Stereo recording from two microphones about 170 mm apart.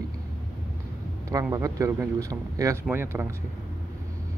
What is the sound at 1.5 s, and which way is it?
Speech, 20° right (ahead or behind).